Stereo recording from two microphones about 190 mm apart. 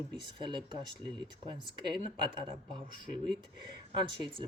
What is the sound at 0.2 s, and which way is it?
Speech, 25° right (ahead or behind).